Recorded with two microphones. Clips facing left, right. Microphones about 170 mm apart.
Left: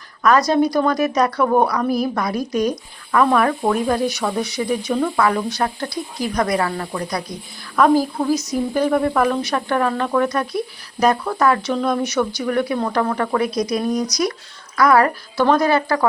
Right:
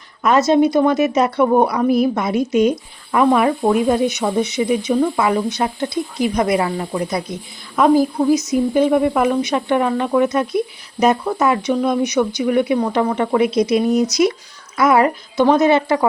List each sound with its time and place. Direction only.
0.2 s speech: 25° right (ahead or behind)